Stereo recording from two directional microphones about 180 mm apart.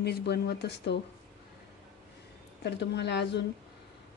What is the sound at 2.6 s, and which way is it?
Speech, 70° left (ahead or behind).